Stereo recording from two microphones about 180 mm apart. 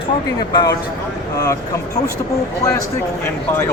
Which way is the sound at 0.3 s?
25° left (ahead or behind).